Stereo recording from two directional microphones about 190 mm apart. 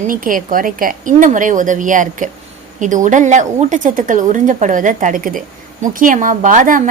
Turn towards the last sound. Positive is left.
turn(degrees=-45)  # may be behind; listen again after turning